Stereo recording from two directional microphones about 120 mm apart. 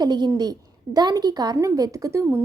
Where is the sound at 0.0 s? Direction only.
35° right (ahead or behind).